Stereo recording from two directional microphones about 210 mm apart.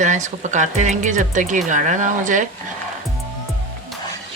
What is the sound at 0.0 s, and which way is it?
Speech, 35° right (ahead or behind).